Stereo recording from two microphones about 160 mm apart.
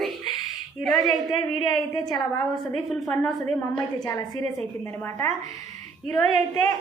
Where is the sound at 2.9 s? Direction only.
Centre (ahead or behind).